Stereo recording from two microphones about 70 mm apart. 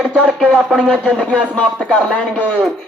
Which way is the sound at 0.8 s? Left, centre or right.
Centre.